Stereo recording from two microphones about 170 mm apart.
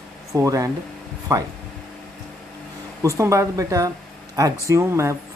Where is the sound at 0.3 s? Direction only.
20° right (ahead or behind).